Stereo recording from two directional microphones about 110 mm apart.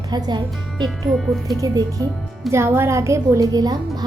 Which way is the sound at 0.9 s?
Centre (ahead or behind).